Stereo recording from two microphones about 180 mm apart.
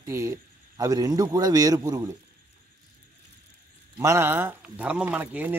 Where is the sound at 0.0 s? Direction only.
15° right (ahead or behind).